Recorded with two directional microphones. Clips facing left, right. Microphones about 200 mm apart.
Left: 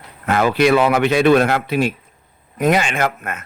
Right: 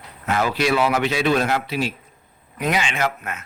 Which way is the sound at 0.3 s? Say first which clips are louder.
Left 6 dB; 55° left (ahead or behind).